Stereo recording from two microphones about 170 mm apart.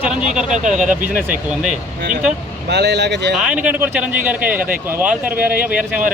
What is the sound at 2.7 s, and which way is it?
Speech, 85° right.